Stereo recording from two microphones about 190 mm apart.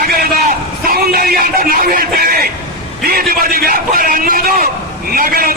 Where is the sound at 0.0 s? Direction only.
50° right (ahead or behind).